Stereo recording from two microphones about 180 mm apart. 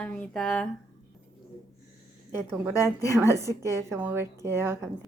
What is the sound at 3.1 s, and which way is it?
A woman's voice, 15° right (ahead or behind).